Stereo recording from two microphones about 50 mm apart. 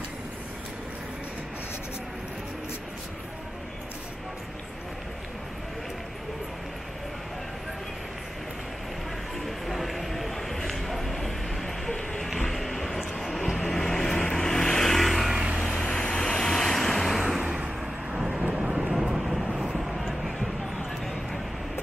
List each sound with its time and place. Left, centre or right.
9.4 s a sound: centre
13.2 s vehicle: centre
15.3 s vehicle: centre
15.8 s vehicle: centre
18.3 s vehicle: right
18.6 s vehicle: centre